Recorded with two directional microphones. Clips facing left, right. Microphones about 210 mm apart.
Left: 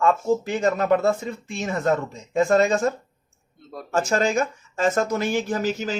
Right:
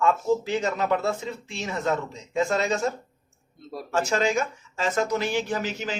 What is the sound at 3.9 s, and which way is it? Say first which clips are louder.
Speech: left 2 dB; 45° left (ahead or behind).